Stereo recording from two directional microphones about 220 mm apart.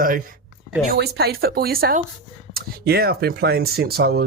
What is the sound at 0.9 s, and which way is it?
Speech, 50° right (ahead or behind).